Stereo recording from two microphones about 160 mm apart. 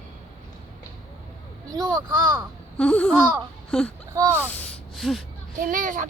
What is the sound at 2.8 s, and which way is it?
Babbling, 5° left (ahead or behind).